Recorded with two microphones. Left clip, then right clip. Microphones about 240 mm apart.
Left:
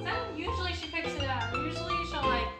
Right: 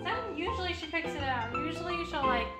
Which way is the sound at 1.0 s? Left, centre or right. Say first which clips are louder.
Even; centre.